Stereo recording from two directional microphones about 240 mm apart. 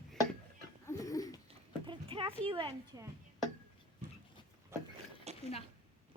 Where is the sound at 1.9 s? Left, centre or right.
Right.